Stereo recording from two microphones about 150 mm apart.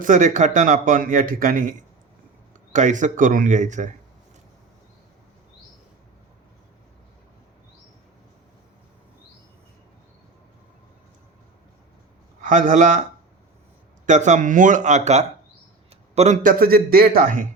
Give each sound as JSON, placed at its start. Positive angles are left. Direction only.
{"t": 0.0, "sound": "speech", "side_deg": -60}
{"t": 2.7, "sound": "speech", "side_deg": -55}
{"t": 12.4, "sound": "a man's voice", "side_deg": -60}
{"t": 14.1, "sound": "speech", "side_deg": -55}